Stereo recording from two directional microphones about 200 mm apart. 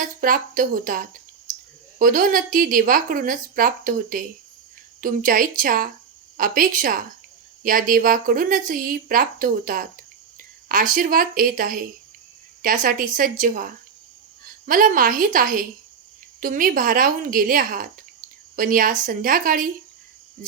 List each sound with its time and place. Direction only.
0.0 s a woman's voice: 45° right (ahead or behind)
14.7 s a woman's voice: 45° right (ahead or behind)